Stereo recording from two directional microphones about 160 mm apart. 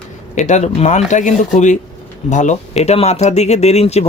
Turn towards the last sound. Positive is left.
turn(degrees=40)  # may be behind; listen again after turning